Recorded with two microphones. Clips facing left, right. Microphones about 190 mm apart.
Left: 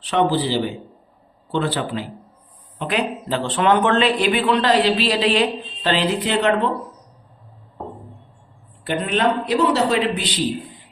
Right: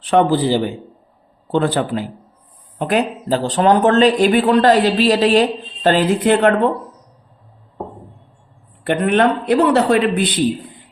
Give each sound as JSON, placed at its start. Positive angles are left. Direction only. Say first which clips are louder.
{"t": 0.0, "sound": "speech", "louder": "right 5 dB", "side_deg": -50}
{"t": 8.8, "sound": "a man's voice", "louder": "right 5 dB", "side_deg": -60}